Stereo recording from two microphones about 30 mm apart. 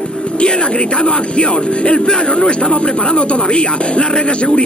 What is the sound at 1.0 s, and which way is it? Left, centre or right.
Speech, left.